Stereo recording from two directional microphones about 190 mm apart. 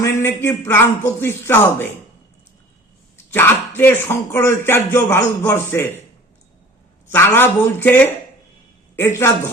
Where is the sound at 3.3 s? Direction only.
10° left (ahead or behind).